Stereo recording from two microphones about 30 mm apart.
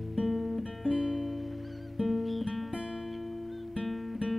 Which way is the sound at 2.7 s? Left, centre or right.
Right.